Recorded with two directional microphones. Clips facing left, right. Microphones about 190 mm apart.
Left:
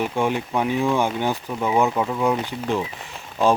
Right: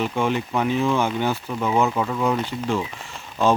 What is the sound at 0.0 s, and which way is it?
Speech, 10° left (ahead or behind).